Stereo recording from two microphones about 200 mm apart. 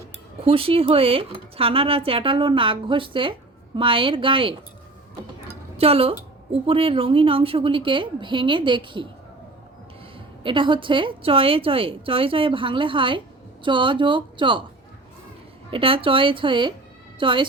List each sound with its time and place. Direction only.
0.4 s speech: 30° right (ahead or behind)
5.5 s a sound: 30° right (ahead or behind)
6.5 s speech: 30° right (ahead or behind)
10.4 s speech: 25° right (ahead or behind)
15.7 s speech: 25° right (ahead or behind)